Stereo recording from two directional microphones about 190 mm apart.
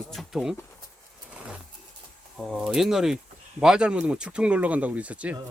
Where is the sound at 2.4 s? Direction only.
Centre (ahead or behind).